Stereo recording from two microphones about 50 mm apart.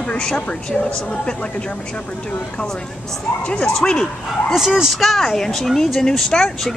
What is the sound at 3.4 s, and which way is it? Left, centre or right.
Speech, left.